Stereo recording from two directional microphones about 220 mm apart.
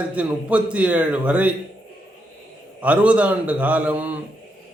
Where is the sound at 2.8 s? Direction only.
5° right (ahead or behind).